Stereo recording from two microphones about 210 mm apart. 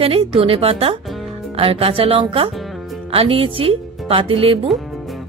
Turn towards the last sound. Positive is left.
turn(degrees=-25)  # may be behind; listen again after turning